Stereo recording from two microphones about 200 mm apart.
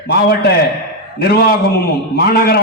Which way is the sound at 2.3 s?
50° left (ahead or behind).